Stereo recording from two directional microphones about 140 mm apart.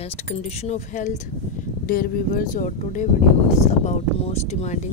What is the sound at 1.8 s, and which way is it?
Speech, 90° left.